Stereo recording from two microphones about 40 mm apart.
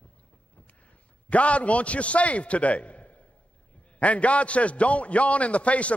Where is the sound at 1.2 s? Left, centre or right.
Left.